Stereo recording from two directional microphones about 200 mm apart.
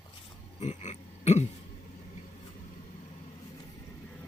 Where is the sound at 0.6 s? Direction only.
35° left (ahead or behind).